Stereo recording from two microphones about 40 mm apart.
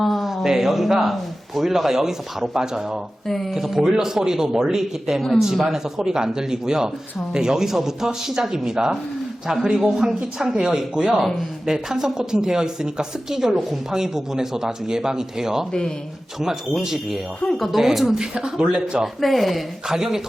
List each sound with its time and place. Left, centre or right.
0.0 s a sound: centre
0.4 s speech: centre
3.2 s speech: centre
3.5 s a man's voice: centre
18.6 s speech: right
19.0 s speech: centre
19.9 s speech: centre